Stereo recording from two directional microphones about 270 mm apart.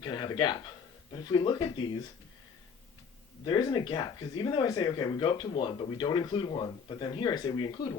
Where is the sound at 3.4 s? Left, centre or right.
Centre.